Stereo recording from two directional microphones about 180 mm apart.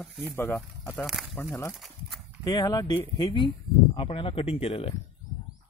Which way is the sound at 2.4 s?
20° left (ahead or behind).